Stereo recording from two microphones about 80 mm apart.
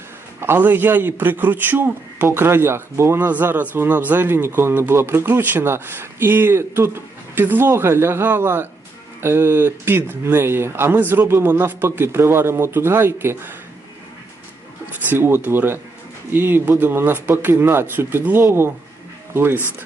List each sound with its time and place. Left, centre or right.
0.3 s speech: right
3.2 s speech: right
15.1 s speech: right